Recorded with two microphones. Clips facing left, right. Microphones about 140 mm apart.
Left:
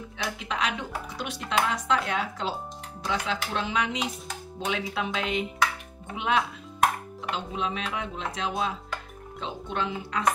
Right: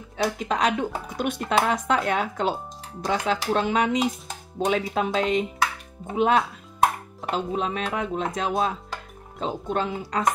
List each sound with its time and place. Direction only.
0.2 s speech: 40° right (ahead or behind)